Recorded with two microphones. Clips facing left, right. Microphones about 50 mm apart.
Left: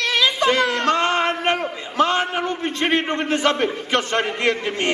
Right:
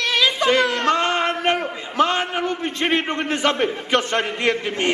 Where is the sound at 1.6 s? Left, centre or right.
Right.